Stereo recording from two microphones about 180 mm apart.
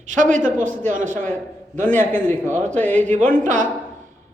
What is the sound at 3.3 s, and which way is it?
Speech, 45° right (ahead or behind).